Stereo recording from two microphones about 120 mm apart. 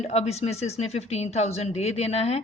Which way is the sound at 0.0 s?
65° left (ahead or behind).